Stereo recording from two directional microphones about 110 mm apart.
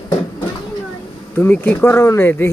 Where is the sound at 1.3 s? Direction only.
20° left (ahead or behind).